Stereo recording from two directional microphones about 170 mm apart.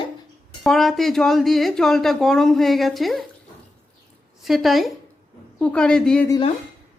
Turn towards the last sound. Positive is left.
turn(degrees=5)  # may be behind; listen again after turning